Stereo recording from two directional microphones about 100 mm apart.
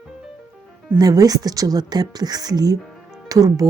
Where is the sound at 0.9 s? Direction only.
40° right (ahead or behind).